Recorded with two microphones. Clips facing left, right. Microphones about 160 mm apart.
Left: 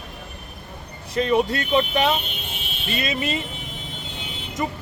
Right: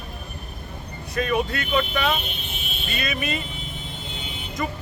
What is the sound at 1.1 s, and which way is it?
Speech, 25° left (ahead or behind).